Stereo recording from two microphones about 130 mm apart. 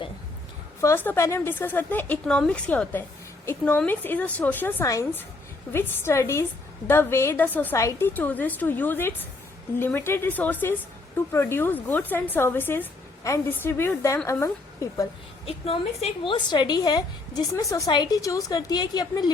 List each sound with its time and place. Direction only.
0.8 s speech: 20° left (ahead or behind)
4.9 s a woman's voice: 25° left (ahead or behind)
15.4 s a woman's voice: 50° left (ahead or behind); by 19.3 s 30° left (ahead or behind)